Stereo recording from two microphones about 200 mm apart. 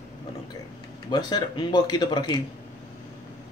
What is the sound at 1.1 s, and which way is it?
Speech, 20° left (ahead or behind).